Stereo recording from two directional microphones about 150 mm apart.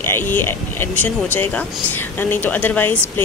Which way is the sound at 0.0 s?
15° left (ahead or behind).